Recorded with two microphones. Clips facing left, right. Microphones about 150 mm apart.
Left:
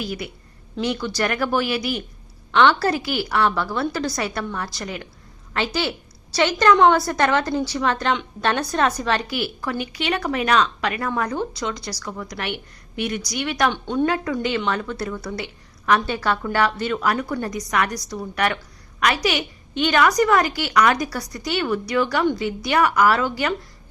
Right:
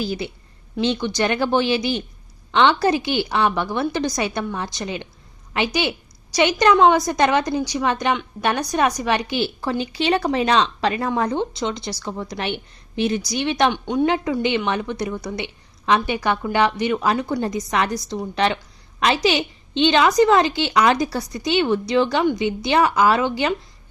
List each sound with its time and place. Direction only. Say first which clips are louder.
0.0 s a woman's voice: right 4 dB; 30° right (ahead or behind)
13.8 s a woman's voice: right 2 dB; 15° right (ahead or behind)